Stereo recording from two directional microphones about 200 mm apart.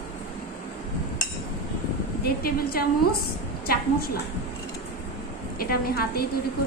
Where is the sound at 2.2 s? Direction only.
50° left (ahead or behind).